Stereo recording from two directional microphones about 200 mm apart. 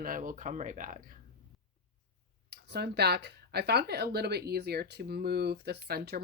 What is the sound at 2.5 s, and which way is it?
Speech, 55° right (ahead or behind).